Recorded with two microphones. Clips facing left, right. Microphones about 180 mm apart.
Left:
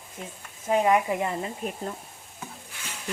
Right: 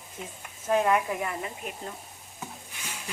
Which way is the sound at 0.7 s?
15° left (ahead or behind).